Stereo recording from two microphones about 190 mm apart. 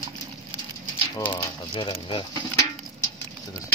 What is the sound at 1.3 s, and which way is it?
Speech, 25° left (ahead or behind).